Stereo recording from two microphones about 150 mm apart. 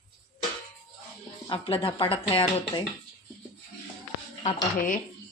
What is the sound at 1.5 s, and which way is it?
Speech, 35° left (ahead or behind).